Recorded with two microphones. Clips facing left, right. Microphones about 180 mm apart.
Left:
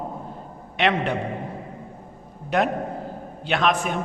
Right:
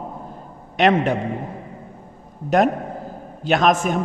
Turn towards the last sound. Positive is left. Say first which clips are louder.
# right 5 dB
turn(degrees=-45)  # may be behind; listen again after turning